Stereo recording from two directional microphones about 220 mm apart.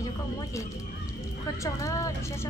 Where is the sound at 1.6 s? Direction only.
15° left (ahead or behind).